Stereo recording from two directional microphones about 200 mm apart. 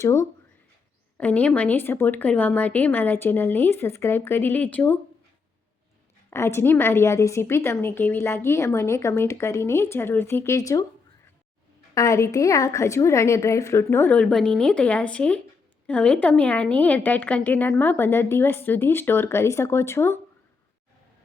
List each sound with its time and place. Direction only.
0.0 s a woman's voice: 15° left (ahead or behind)
6.3 s a woman's voice: 15° left (ahead or behind)
11.9 s a woman's voice: 15° left (ahead or behind)